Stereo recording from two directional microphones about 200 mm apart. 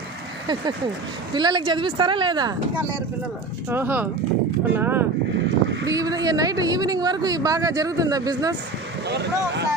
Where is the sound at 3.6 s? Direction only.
10° right (ahead or behind).